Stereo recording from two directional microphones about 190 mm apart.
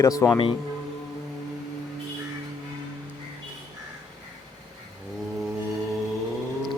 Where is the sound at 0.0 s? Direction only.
15° left (ahead or behind).